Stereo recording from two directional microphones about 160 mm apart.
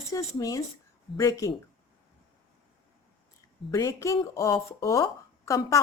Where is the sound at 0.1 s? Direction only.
20° left (ahead or behind).